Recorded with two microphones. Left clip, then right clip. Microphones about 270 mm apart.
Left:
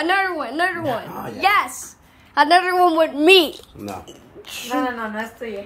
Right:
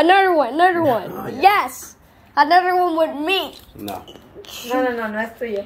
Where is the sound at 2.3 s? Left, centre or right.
Centre.